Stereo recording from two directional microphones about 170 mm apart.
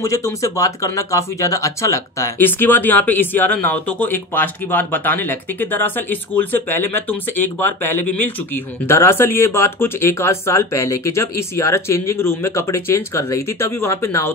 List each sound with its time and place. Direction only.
0.0 s speech: 20° left (ahead or behind)